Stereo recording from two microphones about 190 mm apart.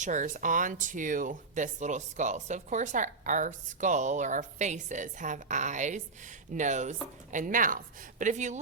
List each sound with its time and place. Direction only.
0.0 s speech: 40° right (ahead or behind)